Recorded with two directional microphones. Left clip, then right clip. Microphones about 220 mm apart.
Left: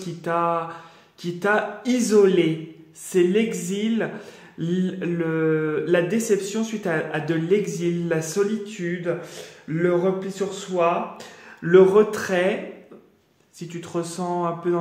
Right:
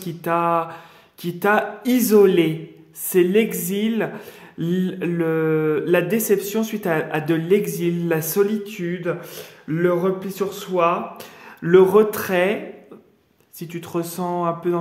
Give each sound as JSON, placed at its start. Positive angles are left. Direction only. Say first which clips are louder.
{"t": 0.2, "sound": "speech", "louder": "right 3 dB", "side_deg": -30}
{"t": 13.6, "sound": "speech", "louder": "right 2 dB", "side_deg": -30}